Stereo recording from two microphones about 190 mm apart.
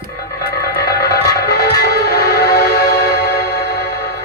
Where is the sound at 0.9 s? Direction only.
55° left (ahead or behind).